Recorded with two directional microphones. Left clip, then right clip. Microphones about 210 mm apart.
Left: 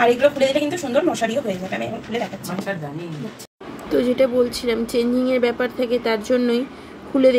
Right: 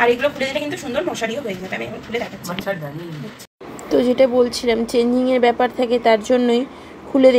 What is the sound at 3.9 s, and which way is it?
Speech, 20° right (ahead or behind).